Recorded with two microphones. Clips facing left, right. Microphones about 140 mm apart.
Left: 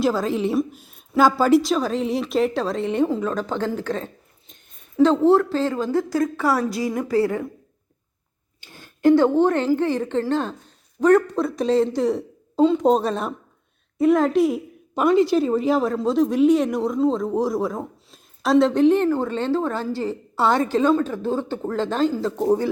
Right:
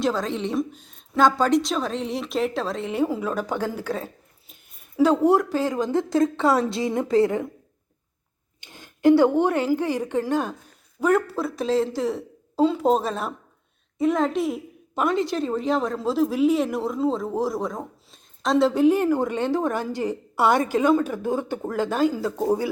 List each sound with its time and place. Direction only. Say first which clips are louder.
0.0 s a woman's voice: left 4 dB; 5° left (ahead or behind); by 7.5 s 20° right (ahead or behind)
8.6 s a woman's voice: left 1 dB; 20° right (ahead or behind)